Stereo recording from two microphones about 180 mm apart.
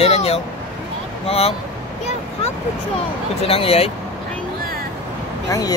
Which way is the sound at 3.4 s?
30° left (ahead or behind).